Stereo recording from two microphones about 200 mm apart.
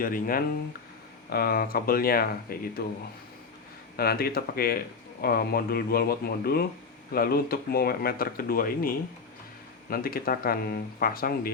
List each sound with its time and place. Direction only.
0.0 s speech: 45° left (ahead or behind)
3.9 s speech: 50° left (ahead or behind)